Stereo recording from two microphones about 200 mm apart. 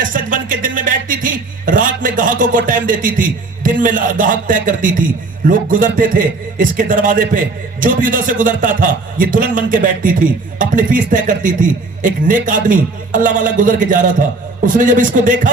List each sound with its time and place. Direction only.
0.0 s a man's voice: 40° right (ahead or behind)